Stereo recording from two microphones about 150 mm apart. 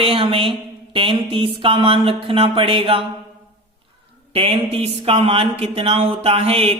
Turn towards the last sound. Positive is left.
turn(degrees=-40)  # may be behind; listen again after turning